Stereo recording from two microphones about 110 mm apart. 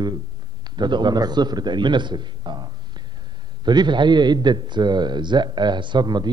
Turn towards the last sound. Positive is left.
turn(degrees=-40)  # may be behind; listen again after turning